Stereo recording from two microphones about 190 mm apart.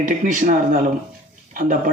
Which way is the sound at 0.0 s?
45° right (ahead or behind).